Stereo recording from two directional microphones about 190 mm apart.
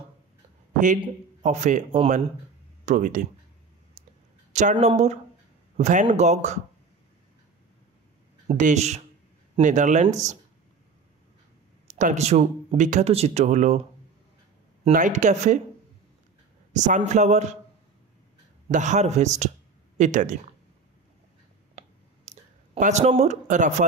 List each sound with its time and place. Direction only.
1.4 s speech: 40° right (ahead or behind)
4.0 s clicking: 40° right (ahead or behind)
4.5 s speech: 40° right (ahead or behind)
8.5 s speech: 40° right (ahead or behind)
11.9 s speech: 40° right (ahead or behind)
14.9 s speech: 40° right (ahead or behind)
16.7 s speech: 40° right (ahead or behind)
18.7 s speech: 40° right (ahead or behind)
21.7 s a sound: 35° right (ahead or behind)